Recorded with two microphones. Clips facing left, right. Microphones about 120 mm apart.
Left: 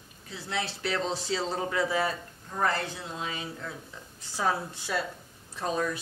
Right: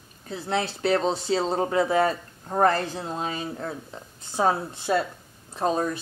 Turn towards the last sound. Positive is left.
turn(degrees=-35)  # may be behind; listen again after turning